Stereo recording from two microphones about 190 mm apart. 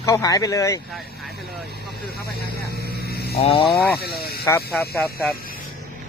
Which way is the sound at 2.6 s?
55° right (ahead or behind).